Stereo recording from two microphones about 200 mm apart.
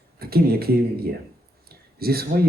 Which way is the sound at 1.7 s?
50° right (ahead or behind).